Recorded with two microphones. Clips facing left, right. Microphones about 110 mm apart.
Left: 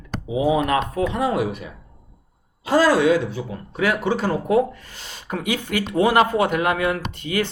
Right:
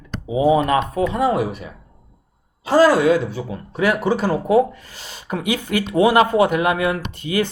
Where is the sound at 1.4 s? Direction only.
35° right (ahead or behind).